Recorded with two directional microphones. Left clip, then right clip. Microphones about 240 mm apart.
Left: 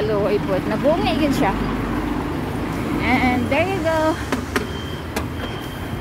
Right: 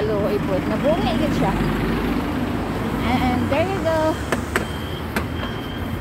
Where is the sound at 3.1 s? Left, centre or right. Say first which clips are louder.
Left 3 dB; centre.